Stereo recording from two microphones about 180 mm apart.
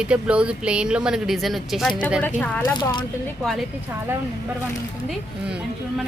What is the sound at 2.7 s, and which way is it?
Speech, 25° left (ahead or behind).